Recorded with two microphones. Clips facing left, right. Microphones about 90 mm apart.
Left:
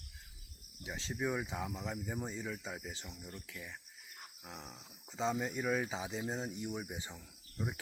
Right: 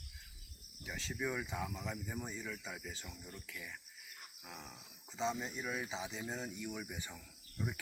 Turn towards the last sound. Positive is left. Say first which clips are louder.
# left 1 dB
turn(degrees=30)  # may be behind; listen again after turning